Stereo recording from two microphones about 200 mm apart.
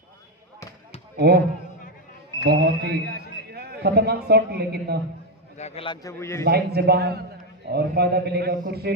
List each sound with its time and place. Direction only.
1.2 s a man's voice: 55° right (ahead or behind)
2.4 s a man's voice: 55° right (ahead or behind)
5.5 s a man's voice: 30° left (ahead or behind); by 6.4 s 15° left (ahead or behind)
6.4 s a man's voice: 55° right (ahead or behind)